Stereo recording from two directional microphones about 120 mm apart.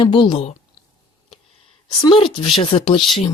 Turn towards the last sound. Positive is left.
turn(degrees=45)  # may be behind; listen again after turning